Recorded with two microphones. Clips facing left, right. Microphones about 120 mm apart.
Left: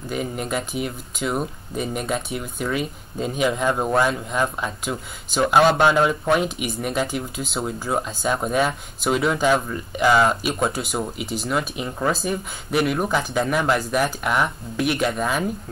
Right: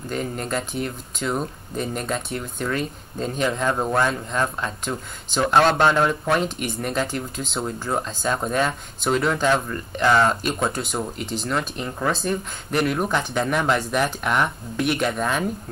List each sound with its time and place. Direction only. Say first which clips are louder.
0.1 s speech: left 1 dB; 5° left (ahead or behind)